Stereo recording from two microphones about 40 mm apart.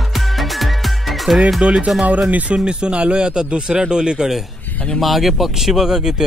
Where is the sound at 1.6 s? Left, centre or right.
Right.